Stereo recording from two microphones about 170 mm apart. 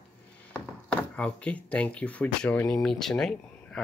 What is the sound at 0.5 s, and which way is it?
Speech, 5° left (ahead or behind).